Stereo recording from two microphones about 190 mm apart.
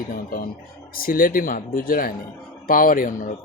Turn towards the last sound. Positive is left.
turn(degrees=45)  # may be behind; listen again after turning